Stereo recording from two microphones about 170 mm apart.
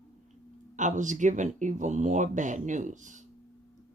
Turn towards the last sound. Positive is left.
turn(degrees=-45)  # may be behind; listen again after turning